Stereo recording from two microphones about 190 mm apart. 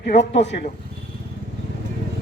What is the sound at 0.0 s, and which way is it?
Speech, 65° left (ahead or behind).